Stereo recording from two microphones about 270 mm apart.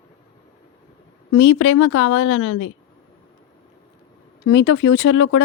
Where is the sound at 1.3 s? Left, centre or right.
Left.